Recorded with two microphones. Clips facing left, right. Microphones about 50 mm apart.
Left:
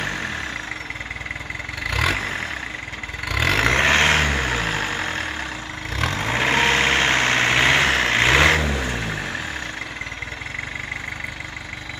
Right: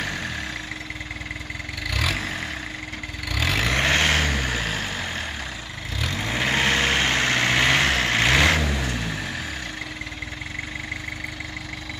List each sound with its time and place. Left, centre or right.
1.9 s vehicle: left
3.3 s vehicle: left
6.0 s vehicle: left